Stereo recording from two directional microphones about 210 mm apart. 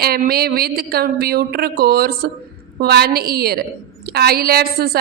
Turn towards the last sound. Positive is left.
turn(degrees=-45)  # may be behind; listen again after turning